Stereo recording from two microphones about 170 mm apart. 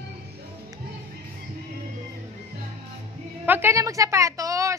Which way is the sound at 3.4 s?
15° right (ahead or behind).